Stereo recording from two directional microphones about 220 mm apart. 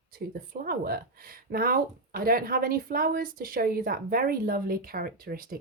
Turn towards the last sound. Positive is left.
turn(degrees=-40)  # may be behind; listen again after turning